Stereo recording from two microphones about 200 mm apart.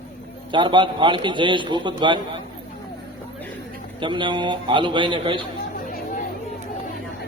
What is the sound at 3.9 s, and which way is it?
A man's voice, 25° right (ahead or behind).